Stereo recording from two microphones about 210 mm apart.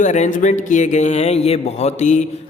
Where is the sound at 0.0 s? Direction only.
35° left (ahead or behind).